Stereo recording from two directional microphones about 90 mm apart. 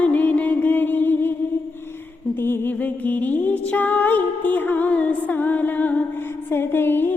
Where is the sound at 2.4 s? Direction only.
25° left (ahead or behind).